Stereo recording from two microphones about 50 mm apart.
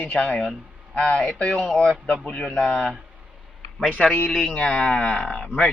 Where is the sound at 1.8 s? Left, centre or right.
Centre.